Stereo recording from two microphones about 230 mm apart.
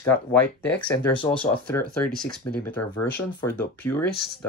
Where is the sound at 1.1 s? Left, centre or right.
Left.